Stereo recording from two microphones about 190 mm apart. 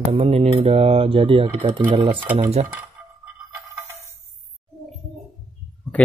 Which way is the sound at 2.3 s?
35° right (ahead or behind).